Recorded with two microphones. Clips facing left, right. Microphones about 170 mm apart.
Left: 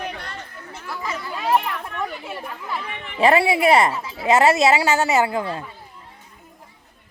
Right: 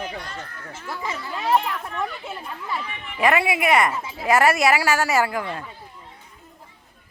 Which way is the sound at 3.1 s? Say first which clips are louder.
Left 4 dB; 30° left (ahead or behind).